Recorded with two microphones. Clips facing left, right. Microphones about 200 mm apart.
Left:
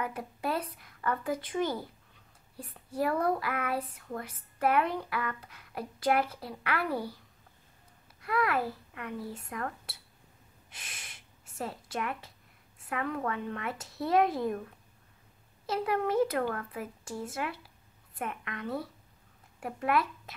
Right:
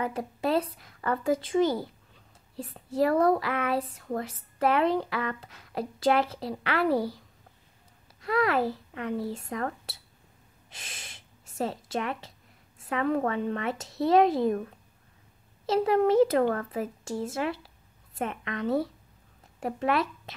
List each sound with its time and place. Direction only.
0.0 s a woman's voice: 30° right (ahead or behind)
3.1 s a woman's voice: 30° right (ahead or behind)
8.3 s a woman's voice: 30° right (ahead or behind)
15.8 s a woman's voice: 30° right (ahead or behind)